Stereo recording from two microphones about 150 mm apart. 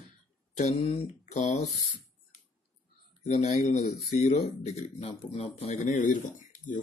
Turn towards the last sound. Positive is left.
turn(degrees=55)  # may be behind; listen again after turning